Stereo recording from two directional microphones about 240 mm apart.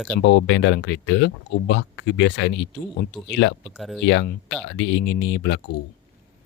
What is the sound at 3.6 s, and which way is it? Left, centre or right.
Speech, centre.